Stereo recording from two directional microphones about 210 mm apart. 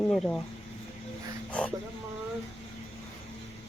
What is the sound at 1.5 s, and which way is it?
Speech, 5° left (ahead or behind).